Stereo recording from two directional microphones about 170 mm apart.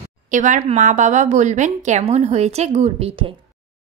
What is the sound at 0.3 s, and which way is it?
A woman's voice, 45° right (ahead or behind).